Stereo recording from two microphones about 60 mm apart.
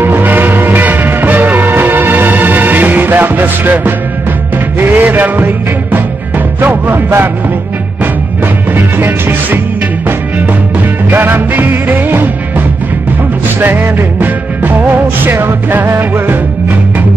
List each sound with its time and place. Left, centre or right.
0.0 s music: right
8.7 s music: right
11.1 s music: right
13.6 s music: right